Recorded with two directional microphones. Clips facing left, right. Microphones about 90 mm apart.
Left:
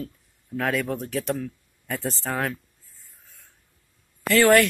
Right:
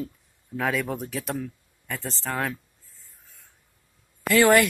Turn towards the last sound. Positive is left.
turn(degrees=-5)  # may be behind; listen again after turning